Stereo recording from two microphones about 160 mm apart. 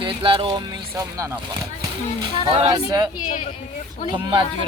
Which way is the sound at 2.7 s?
25° right (ahead or behind).